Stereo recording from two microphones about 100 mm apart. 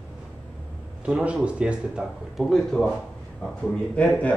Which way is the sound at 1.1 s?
10° right (ahead or behind).